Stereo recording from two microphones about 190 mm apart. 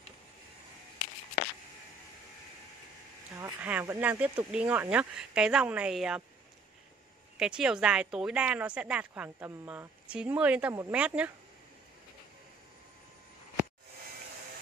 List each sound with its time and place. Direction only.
3.6 s speech: 10° right (ahead or behind)
7.3 s speech: 5° right (ahead or behind)